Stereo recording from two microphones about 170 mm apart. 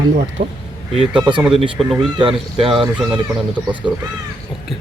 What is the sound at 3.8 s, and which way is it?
Speech, 5° right (ahead or behind).